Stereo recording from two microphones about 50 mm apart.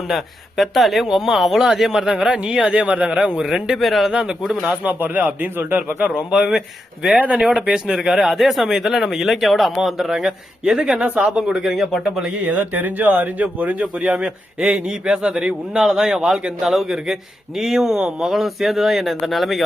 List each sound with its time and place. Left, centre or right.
0.1 s a man's voice: centre
3.8 s a man's voice: centre
4.1 s speech: centre
4.6 s speech: right
7.1 s a man's voice: right
7.3 s speech: centre
10.9 s a man's voice: right
11.3 s speech: centre
12.5 s speech: right
13.8 s a man's voice: right
16.6 s a man's voice: centre